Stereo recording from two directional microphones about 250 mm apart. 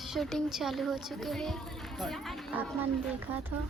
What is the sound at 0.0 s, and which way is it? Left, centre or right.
A woman's voice, centre.